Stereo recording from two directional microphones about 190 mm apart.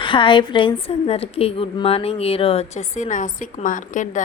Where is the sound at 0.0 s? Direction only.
25° left (ahead or behind).